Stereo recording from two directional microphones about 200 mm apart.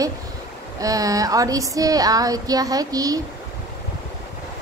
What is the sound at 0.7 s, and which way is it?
A woman's voice, 15° right (ahead or behind).